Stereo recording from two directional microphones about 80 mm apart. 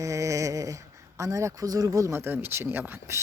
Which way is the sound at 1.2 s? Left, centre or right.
Right.